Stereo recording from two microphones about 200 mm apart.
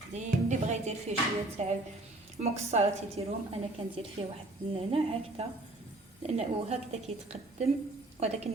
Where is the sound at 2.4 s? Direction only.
30° right (ahead or behind).